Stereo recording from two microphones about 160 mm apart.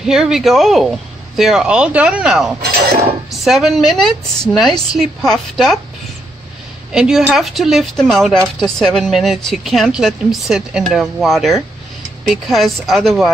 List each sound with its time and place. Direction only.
0.0 s a woman's voice: 5° right (ahead or behind)
2.6 s cutlery: 75° right (ahead or behind)
3.3 s a woman's voice: centre (ahead or behind)
6.9 s a woman's voice: 5° right (ahead or behind)